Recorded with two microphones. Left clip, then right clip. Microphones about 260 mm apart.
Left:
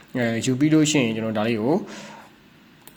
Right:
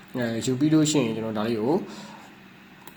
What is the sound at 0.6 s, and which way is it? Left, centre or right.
Speech, left.